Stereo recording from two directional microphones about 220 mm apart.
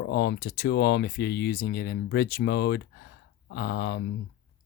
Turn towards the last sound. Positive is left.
turn(degrees=55)  # may be behind; listen again after turning